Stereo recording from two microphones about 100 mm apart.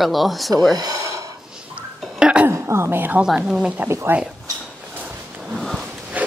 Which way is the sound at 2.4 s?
25° right (ahead or behind).